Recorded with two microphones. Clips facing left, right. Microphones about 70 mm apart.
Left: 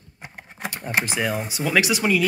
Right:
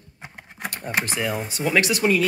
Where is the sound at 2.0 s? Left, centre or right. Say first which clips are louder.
Right 3 dB; centre.